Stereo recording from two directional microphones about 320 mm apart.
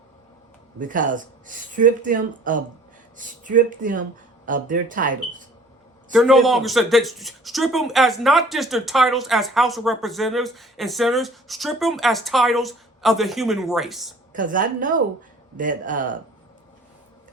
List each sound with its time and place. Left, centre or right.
0.8 s speech: right
6.1 s speech: centre
14.3 s speech: right